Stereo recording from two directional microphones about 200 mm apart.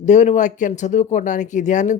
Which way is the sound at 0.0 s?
35° left (ahead or behind).